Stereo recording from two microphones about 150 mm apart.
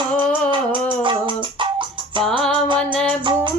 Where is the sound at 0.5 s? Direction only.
35° right (ahead or behind).